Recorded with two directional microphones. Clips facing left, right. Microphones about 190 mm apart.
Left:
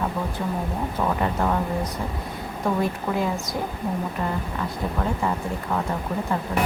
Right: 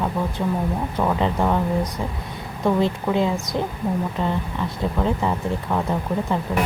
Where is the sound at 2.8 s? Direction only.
25° right (ahead or behind).